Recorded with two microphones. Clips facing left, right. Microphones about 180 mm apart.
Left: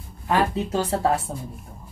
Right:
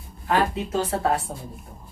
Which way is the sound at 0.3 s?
30° left (ahead or behind).